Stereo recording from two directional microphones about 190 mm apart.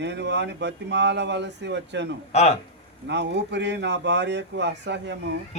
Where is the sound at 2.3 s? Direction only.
35° left (ahead or behind).